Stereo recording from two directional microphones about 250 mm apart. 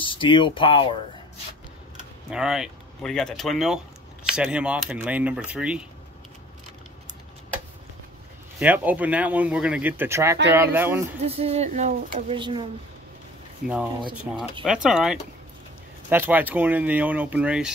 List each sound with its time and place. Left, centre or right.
0.0 s speech: centre
2.3 s speech: centre
8.5 s speech: centre
11.2 s speech: right
13.6 s speech: right
14.0 s speech: centre
14.6 s speech: centre